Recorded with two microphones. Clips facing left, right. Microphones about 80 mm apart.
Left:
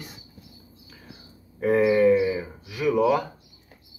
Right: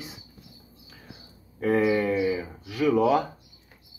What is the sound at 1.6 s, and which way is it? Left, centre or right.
Speech, centre.